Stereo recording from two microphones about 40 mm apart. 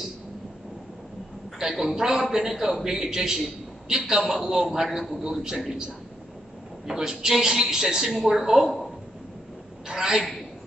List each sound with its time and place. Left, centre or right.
1.6 s a man's voice: centre
6.9 s a man's voice: centre
9.8 s a sound: centre